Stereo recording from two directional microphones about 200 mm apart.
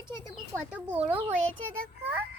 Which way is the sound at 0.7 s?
5° right (ahead or behind).